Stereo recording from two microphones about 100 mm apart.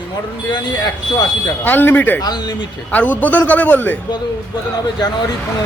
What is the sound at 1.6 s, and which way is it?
Speech, 20° left (ahead or behind).